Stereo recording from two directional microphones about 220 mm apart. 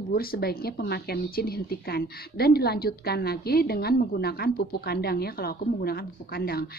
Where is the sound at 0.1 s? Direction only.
45° left (ahead or behind).